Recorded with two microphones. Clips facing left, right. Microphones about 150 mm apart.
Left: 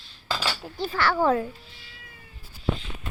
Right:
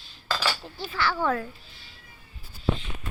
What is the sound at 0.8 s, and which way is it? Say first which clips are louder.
Speech: left 4 dB; 55° left (ahead or behind).